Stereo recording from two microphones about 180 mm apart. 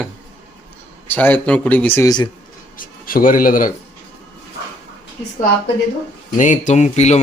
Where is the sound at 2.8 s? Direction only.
50° left (ahead or behind).